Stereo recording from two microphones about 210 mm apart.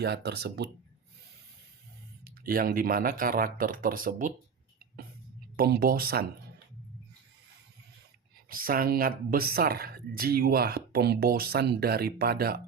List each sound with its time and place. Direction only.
0.0 s speech: 50° right (ahead or behind)
2.2 s speech: 45° right (ahead or behind)
5.5 s speech: 45° right (ahead or behind)
8.4 s speech: 45° right (ahead or behind)